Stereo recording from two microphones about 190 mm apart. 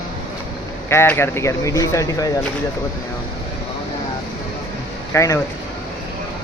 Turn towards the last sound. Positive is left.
turn(degrees=15)  # may be behind; listen again after turning